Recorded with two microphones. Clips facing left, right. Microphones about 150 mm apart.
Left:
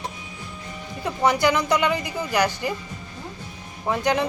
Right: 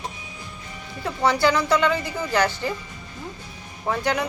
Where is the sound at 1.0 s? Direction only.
20° left (ahead or behind).